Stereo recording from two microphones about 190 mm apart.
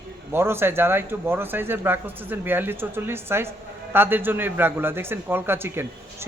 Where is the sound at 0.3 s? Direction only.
10° right (ahead or behind).